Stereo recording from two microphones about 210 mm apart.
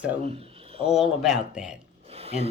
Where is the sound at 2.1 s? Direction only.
30° right (ahead or behind).